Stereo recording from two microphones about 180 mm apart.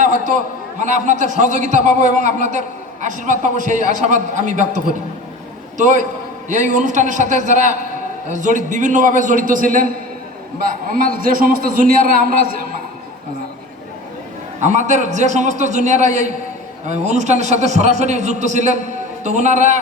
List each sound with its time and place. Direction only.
0.0 s a man's voice: 45° right (ahead or behind)
14.6 s a man's voice: 40° right (ahead or behind)